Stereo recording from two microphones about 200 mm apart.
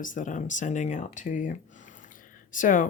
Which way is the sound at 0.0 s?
40° left (ahead or behind).